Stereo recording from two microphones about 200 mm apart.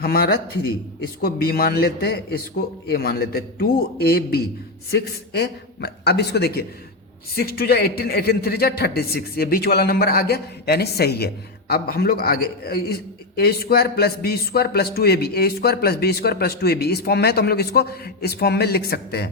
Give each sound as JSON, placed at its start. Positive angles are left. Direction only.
{"t": 0.0, "sound": "a man's voice", "side_deg": 50}